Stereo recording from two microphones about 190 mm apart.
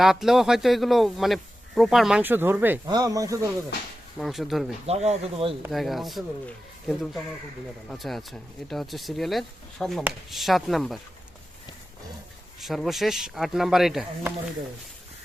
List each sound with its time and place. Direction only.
0.0 s speech: centre (ahead or behind)
2.8 s speech: 20° right (ahead or behind)
4.2 s speech: centre (ahead or behind)
4.9 s speech: 35° right (ahead or behind)
5.7 s speech: centre (ahead or behind)
12.5 s speech: centre (ahead or behind)